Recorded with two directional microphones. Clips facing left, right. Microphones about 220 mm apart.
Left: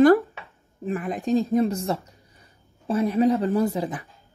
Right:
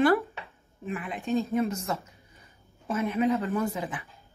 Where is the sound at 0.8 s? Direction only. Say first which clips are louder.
Left 6 dB; 40° left (ahead or behind).